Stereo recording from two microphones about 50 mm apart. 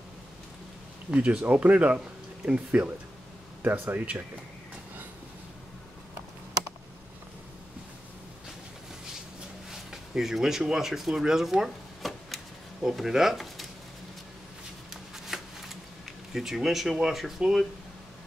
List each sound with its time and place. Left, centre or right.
1.1 s speech: right
9.7 s a sound: centre
10.6 s speech: centre
10.9 s speech: centre
13.1 s speech: centre
15.1 s a sound: centre